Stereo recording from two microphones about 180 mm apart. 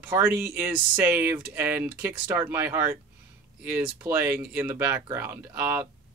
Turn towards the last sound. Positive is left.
turn(degrees=-15)  # may be behind; listen again after turning